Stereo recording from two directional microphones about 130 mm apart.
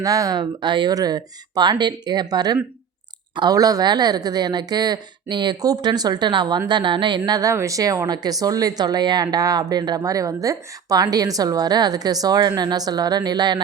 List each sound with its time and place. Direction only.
0.0 s speech: 25° right (ahead or behind)